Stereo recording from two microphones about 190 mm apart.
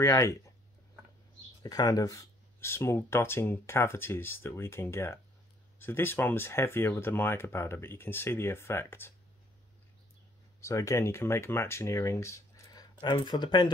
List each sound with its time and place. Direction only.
0.0 s speech: 15° left (ahead or behind)
1.6 s speech: 20° left (ahead or behind)
10.6 s speech: 15° left (ahead or behind)